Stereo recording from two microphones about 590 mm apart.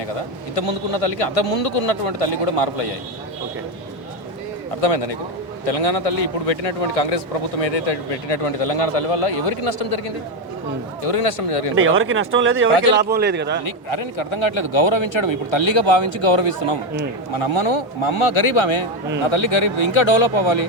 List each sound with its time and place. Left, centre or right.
0.5 s a man's voice: left
4.8 s a man's voice: left
11.0 s a man's voice: left
11.9 s speech: centre
13.7 s speech: left